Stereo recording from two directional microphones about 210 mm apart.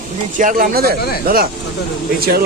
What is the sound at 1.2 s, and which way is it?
Speech, 45° right (ahead or behind).